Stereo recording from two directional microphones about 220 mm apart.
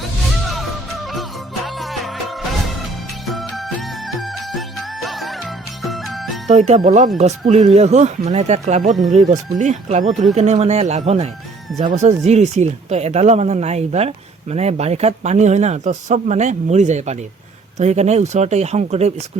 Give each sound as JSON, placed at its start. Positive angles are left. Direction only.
{"t": 0.4, "sound": "music", "side_deg": 0}
{"t": 3.2, "sound": "music", "side_deg": 0}
{"t": 6.5, "sound": "speech", "side_deg": -35}